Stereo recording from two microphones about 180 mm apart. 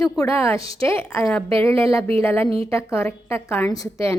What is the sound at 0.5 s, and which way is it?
Speech, 30° right (ahead or behind).